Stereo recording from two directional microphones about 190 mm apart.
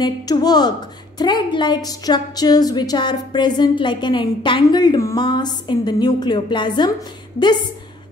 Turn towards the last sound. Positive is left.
turn(degrees=25)  # may be behind; listen again after turning